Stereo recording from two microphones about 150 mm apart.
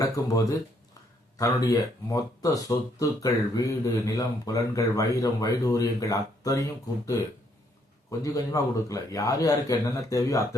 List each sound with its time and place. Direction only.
0.2 s speech: 20° left (ahead or behind)
1.4 s speech: 20° left (ahead or behind)